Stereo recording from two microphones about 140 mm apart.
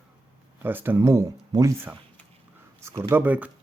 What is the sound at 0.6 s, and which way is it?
Speech, 15° right (ahead or behind).